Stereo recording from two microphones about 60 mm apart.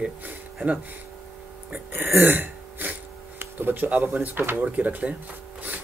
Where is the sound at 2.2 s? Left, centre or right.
Right.